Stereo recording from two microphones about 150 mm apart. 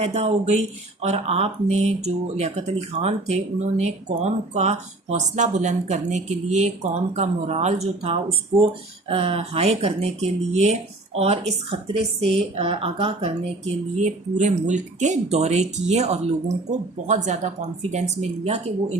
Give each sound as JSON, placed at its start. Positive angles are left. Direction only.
{"t": 0.0, "sound": "speech", "side_deg": -45}
{"t": 13.9, "sound": "speech", "side_deg": -55}